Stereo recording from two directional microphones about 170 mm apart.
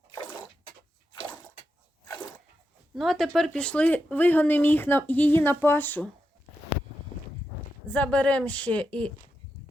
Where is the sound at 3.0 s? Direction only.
Centre (ahead or behind).